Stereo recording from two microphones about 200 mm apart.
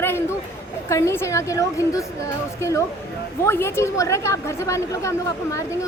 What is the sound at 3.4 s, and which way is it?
A woman's voice, 10° left (ahead or behind).